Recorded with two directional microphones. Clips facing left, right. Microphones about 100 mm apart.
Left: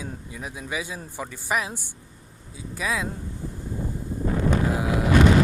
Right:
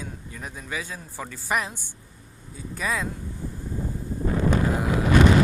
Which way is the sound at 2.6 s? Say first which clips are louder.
Even; 5° left (ahead or behind).